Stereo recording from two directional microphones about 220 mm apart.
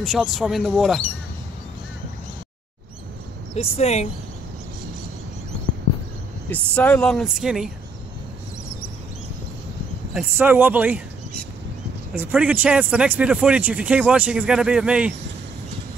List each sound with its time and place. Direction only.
0.0 s speech: centre (ahead or behind)
3.5 s speech: 30° left (ahead or behind)
6.5 s speech: 5° left (ahead or behind)
10.1 s speech: 10° right (ahead or behind)
12.1 s speech: 5° right (ahead or behind)